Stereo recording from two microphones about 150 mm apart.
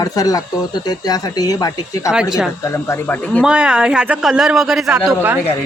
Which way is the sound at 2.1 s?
5° right (ahead or behind).